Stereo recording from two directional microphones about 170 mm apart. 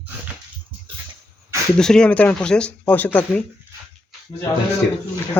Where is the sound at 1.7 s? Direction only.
5° left (ahead or behind).